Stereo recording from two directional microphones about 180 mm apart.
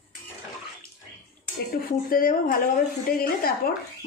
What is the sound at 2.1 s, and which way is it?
A woman's voice, 50° left (ahead or behind).